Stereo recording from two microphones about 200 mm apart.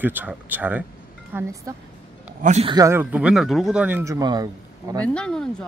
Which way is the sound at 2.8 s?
10° right (ahead or behind).